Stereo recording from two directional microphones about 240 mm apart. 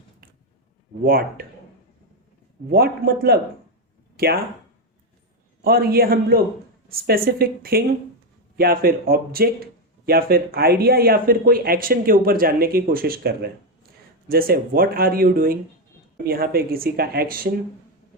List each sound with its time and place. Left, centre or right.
1.0 s speech: right
2.6 s speech: right
5.6 s speech: right